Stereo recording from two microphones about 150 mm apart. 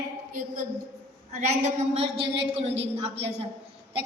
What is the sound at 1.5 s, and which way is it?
A woman's voice, 50° right (ahead or behind).